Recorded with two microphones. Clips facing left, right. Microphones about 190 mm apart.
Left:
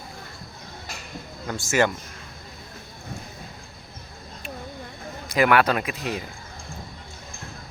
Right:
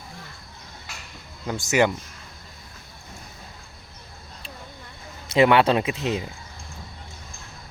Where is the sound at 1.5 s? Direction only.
15° right (ahead or behind).